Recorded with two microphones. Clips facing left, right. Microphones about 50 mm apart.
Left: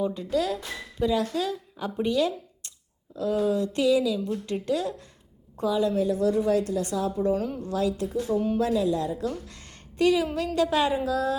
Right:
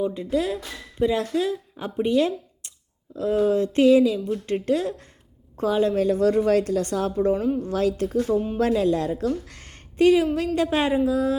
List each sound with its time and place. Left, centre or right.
0.0 s speech: right
5.5 s a woman's voice: right
6.0 s a woman's voice: right
7.3 s a woman's voice: centre
7.6 s a woman's voice: right
8.5 s speech: right
9.2 s speech: right